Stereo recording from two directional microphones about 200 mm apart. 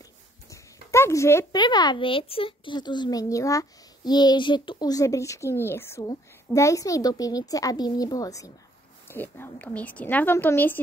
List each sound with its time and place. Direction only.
0.5 s speech: 15° left (ahead or behind)